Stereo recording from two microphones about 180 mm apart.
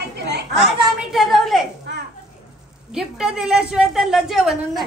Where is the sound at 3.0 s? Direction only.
5° right (ahead or behind).